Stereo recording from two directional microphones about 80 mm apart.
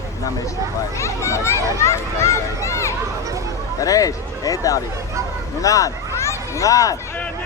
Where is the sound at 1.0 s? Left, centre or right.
Left.